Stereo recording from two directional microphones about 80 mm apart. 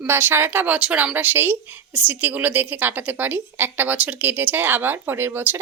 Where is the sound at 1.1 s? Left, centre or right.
Right.